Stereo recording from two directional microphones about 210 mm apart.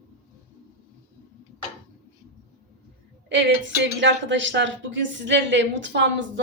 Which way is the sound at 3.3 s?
60° right (ahead or behind).